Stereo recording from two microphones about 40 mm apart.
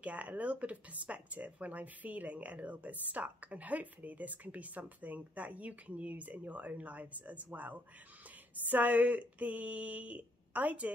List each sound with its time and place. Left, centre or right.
0.0 s speech: right